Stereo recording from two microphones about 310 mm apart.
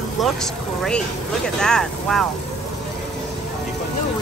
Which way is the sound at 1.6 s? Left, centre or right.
Centre.